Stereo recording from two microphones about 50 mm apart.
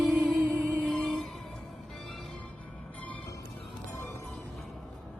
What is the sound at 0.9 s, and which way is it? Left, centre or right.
Music, centre.